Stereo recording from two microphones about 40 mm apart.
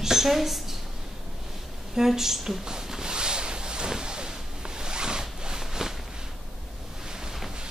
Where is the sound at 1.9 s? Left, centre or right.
Centre.